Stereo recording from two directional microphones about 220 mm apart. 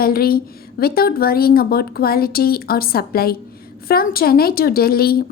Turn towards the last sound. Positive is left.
turn(degrees=45)  # may be behind; listen again after turning